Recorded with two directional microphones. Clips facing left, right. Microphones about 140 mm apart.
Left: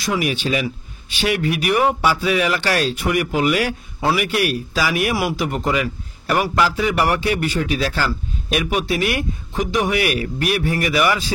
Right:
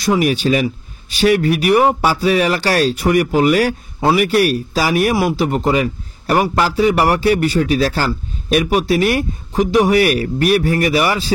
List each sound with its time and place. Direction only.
0.0 s a man's voice: 40° right (ahead or behind)